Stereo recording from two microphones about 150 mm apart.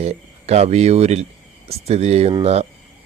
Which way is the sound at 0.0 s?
45° right (ahead or behind).